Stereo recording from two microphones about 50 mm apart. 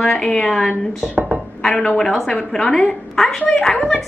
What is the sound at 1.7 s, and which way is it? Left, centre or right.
A woman's voice, centre.